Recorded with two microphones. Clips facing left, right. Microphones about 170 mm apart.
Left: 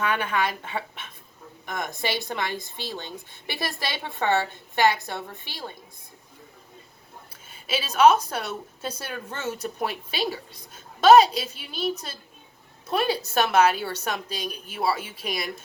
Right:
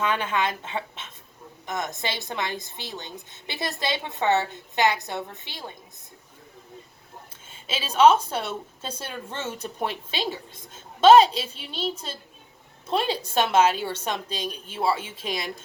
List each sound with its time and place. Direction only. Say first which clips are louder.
0.0 s a woman's voice: even; 25° right (ahead or behind)
7.5 s a woman's voice: even; 25° right (ahead or behind)